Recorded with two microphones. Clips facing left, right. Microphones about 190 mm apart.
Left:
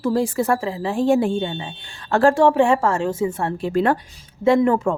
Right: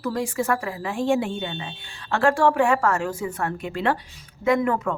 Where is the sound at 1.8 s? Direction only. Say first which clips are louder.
Left 5 dB; 45° left (ahead or behind).